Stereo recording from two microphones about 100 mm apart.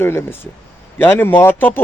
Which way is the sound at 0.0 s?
25° left (ahead or behind).